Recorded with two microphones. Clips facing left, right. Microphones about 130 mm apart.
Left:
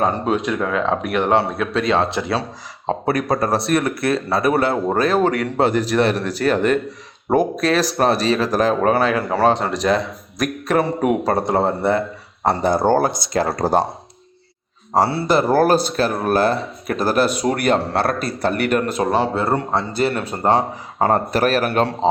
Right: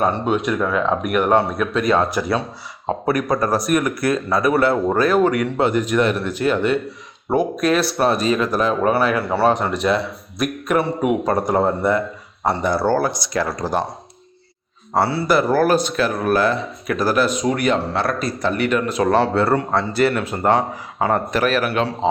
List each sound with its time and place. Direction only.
0.0 s speech: 35° left (ahead or behind)
13.5 s a man's voice: 60° left (ahead or behind)
14.9 s speech: 30° left (ahead or behind)
18.1 s a man's voice: 55° left (ahead or behind)
19.0 s speech: 15° left (ahead or behind); by 21.9 s 45° left (ahead or behind)